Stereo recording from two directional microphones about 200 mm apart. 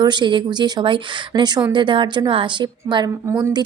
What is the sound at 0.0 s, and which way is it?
A woman's voice, 20° right (ahead or behind).